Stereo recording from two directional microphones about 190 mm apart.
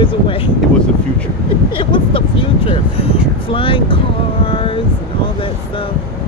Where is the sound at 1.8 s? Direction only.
25° left (ahead or behind).